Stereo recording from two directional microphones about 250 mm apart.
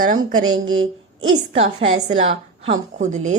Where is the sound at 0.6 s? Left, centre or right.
Right.